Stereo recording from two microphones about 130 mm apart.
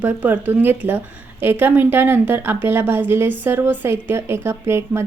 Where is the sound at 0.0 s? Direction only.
10° right (ahead or behind).